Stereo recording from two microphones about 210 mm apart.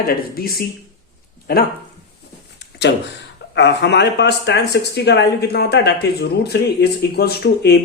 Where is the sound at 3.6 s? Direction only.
55° left (ahead or behind).